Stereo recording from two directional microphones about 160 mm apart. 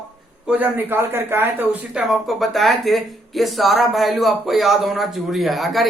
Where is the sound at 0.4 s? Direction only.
10° right (ahead or behind).